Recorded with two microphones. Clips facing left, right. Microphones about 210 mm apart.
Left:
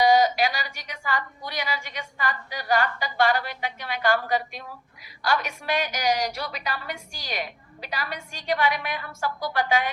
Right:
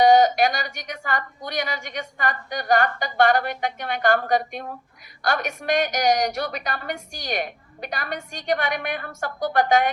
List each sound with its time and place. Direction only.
0.0 s a woman's voice: 55° right (ahead or behind)